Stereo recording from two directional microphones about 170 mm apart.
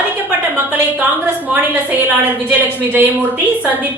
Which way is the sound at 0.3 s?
10° right (ahead or behind).